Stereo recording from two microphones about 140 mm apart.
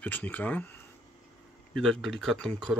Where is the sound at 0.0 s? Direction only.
10° left (ahead or behind).